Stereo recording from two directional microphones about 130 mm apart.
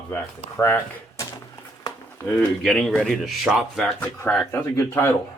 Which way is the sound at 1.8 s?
20° left (ahead or behind).